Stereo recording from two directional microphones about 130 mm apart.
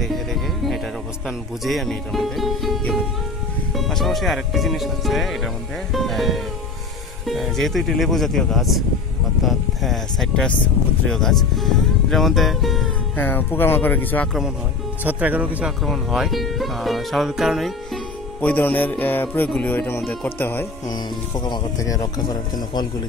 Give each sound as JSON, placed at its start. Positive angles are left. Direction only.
{"t": 0.0, "sound": "music", "side_deg": 0}
{"t": 1.6, "sound": "speech", "side_deg": 0}
{"t": 13.1, "sound": "speech", "side_deg": 15}
{"t": 15.0, "sound": "speech", "side_deg": -10}
{"t": 15.8, "sound": "speech", "side_deg": 0}
{"t": 18.4, "sound": "speech", "side_deg": 15}
{"t": 21.5, "sound": "speech", "side_deg": 25}